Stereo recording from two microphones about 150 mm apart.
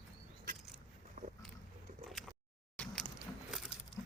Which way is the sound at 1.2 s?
65° right (ahead or behind).